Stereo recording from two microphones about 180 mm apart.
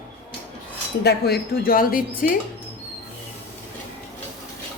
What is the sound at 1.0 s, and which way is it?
A woman's voice, 65° left (ahead or behind).